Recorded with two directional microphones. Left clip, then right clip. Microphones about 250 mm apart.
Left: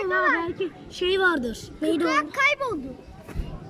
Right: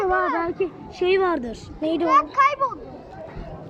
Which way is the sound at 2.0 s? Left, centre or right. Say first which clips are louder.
Right 6 dB; left.